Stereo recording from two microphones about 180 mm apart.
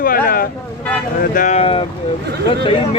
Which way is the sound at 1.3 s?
40° left (ahead or behind).